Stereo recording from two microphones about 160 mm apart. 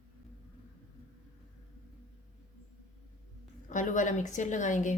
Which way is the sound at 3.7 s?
55° left (ahead or behind).